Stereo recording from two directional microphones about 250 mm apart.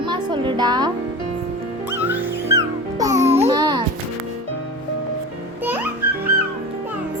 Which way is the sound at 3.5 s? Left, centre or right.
Centre.